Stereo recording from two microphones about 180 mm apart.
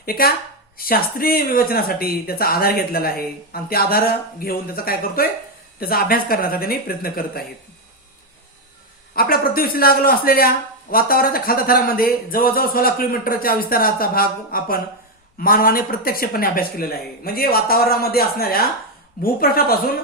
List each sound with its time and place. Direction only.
0.0 s speech: 55° left (ahead or behind)
9.1 s speech: 55° left (ahead or behind)